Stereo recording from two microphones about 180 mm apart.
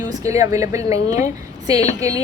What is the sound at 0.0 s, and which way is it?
A woman's voice, 20° right (ahead or behind).